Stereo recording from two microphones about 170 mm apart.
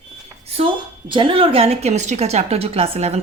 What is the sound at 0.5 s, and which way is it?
Speech, 30° right (ahead or behind).